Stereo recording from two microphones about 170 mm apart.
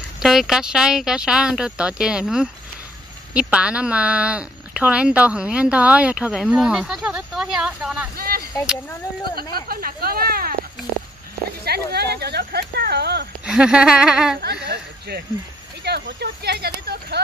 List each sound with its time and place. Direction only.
0.2 s speech: 5° right (ahead or behind)
8.2 s a sound: 60° right (ahead or behind)
9.4 s speech: 25° left (ahead or behind)
9.7 s speech: 60° right (ahead or behind)
11.6 s speech: 70° right (ahead or behind)
13.5 s speech: 5° right (ahead or behind)
14.7 s speech: 70° right (ahead or behind)